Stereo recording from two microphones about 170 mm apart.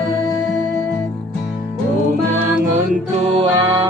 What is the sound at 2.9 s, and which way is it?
Music, 40° right (ahead or behind).